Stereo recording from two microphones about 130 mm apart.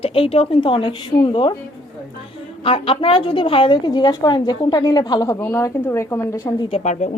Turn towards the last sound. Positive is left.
turn(degrees=65)  # may be behind; listen again after turning